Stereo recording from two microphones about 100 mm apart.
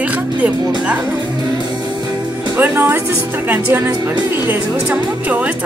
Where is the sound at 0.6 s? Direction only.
45° right (ahead or behind).